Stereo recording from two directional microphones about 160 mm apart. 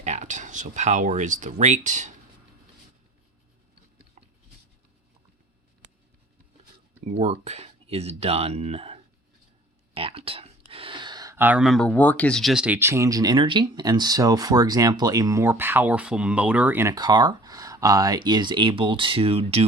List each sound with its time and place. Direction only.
0.0 s speech: 45° right (ahead or behind)
7.0 s speech: 40° right (ahead or behind)